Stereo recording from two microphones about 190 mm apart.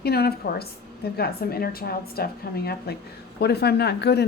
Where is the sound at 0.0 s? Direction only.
55° left (ahead or behind).